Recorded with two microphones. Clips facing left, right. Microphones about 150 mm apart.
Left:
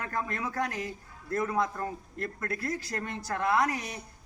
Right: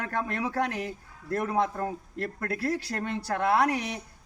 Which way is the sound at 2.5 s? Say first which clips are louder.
Right 5 dB; 65° right (ahead or behind).